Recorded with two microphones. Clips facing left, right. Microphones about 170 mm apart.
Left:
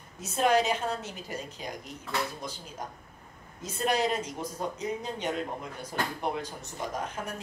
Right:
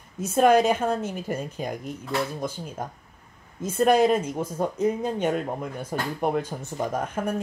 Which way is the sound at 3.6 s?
50° right (ahead or behind).